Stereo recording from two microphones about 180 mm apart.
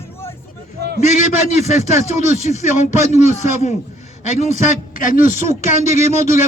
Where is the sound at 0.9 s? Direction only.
40° left (ahead or behind).